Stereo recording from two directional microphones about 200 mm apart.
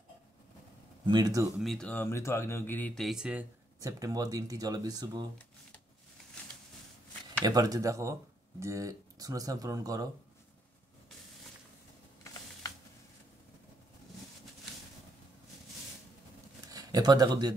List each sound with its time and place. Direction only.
1.0 s speech: 20° right (ahead or behind)
1.6 s speech: centre (ahead or behind); by 5.3 s 20° right (ahead or behind)
7.4 s speech: 20° right (ahead or behind)
16.6 s speech: 20° right (ahead or behind)